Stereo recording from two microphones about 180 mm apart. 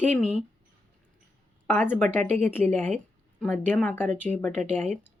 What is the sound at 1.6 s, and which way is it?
A woman's voice, 10° left (ahead or behind).